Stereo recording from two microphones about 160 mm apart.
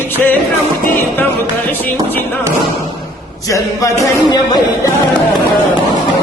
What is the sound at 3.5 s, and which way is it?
Speech, 20° left (ahead or behind).